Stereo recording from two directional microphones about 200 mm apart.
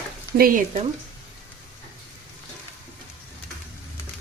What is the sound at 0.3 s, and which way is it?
Speech, 45° right (ahead or behind).